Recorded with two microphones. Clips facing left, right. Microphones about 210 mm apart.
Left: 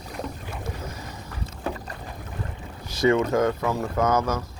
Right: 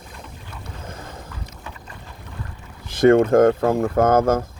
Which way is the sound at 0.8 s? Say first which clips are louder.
Even; 50° right (ahead or behind).